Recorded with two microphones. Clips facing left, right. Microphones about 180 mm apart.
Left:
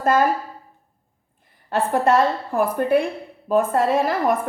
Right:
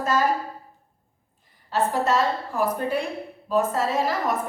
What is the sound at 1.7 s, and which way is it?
A woman's voice, 55° left (ahead or behind).